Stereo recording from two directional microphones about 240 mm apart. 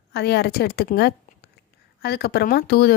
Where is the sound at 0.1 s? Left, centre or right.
Left.